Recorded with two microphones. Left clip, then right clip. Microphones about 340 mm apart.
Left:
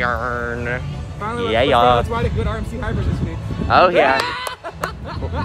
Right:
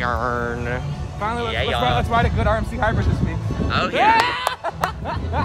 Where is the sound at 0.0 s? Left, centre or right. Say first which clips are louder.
Left 1 dB; centre.